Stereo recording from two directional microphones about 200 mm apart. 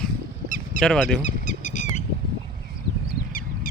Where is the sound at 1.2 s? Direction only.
40° left (ahead or behind).